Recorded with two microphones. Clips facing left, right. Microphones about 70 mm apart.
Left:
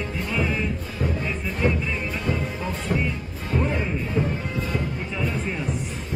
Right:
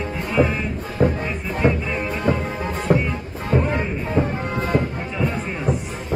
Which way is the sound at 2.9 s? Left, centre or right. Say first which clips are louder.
Right 8 dB; right.